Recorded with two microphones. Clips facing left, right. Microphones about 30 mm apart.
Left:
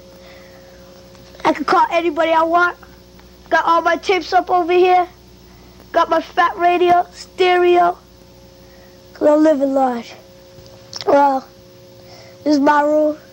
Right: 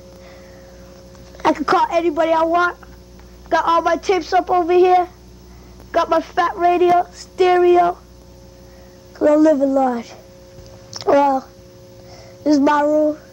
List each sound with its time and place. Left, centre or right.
1.5 s a woman's voice: left
2.4 s speech: centre
3.5 s child singing: centre
3.9 s a woman's voice: left
5.9 s a sound: centre
6.1 s a woman's voice: left
9.1 s a woman's voice: left
10.9 s a sound: left
12.1 s music: left
12.6 s child singing: centre